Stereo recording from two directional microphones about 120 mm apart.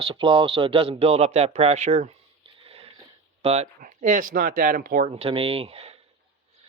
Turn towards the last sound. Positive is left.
turn(degrees=-55)  # may be behind; listen again after turning